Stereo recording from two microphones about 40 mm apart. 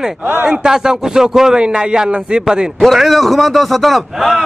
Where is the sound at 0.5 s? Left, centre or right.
Centre.